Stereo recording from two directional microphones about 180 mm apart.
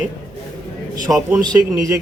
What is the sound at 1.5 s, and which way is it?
Speech, 20° right (ahead or behind).